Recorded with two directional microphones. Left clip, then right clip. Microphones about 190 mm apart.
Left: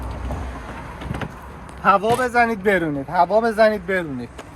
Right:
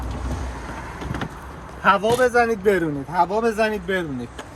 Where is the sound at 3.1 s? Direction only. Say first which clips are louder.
Left 3 dB; 5° left (ahead or behind).